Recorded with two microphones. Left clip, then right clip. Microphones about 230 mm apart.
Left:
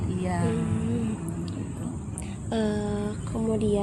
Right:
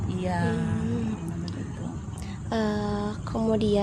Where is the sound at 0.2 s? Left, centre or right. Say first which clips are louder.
Right 1 dB; right.